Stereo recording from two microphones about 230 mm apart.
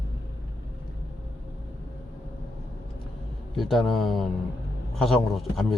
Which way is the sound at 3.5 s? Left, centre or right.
Centre.